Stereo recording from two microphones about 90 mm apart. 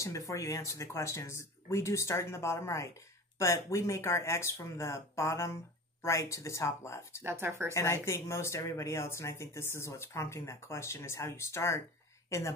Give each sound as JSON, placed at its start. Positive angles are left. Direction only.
{"t": 0.0, "sound": "speech", "side_deg": 35}
{"t": 7.2, "sound": "speech", "side_deg": -25}
{"t": 7.7, "sound": "a woman's voice", "side_deg": 30}